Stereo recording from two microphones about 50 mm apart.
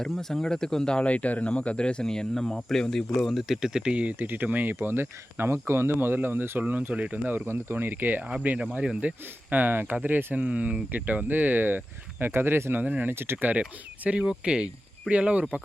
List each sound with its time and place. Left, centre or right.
0.0 s speech: centre
3.7 s speech: centre
4.2 s speech: right
4.8 s speech: right
6.6 s speech: right
7.3 s speech: right
8.3 s speech: right
10.4 s speech: right
12.8 s speech: right
13.1 s speech: right
13.6 s speech: right